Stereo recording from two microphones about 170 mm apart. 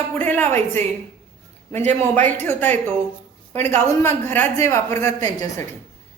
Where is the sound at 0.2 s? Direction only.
10° left (ahead or behind).